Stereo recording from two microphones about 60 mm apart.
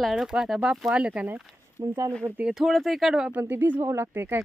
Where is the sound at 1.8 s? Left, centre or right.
Right.